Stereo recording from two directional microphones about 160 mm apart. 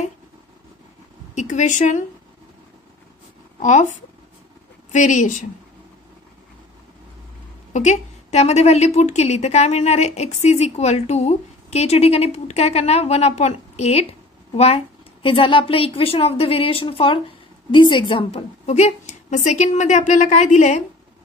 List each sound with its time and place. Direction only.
1.3 s a woman's voice: 50° left (ahead or behind)
3.5 s a woman's voice: 50° left (ahead or behind)
4.9 s a woman's voice: 50° left (ahead or behind)
7.7 s a woman's voice: 45° left (ahead or behind)
15.2 s a woman's voice: 35° left (ahead or behind)